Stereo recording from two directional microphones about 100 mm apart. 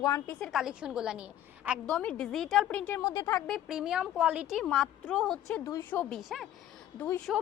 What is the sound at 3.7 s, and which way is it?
A woman's voice, 5° right (ahead or behind).